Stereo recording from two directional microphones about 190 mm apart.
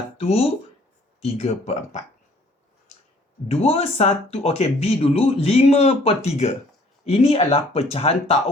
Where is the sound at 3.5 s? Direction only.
30° left (ahead or behind).